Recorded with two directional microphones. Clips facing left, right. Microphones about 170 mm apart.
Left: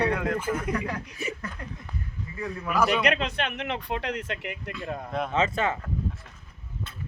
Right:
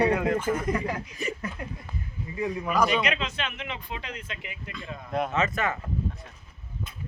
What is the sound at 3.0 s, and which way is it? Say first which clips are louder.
Speech: left 3 dB; 60° left (ahead or behind).